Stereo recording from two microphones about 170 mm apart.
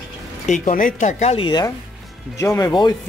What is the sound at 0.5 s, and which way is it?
Speech, 50° left (ahead or behind).